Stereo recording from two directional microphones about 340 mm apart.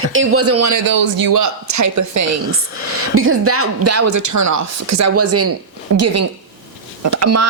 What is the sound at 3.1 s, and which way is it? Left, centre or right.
Speech, right.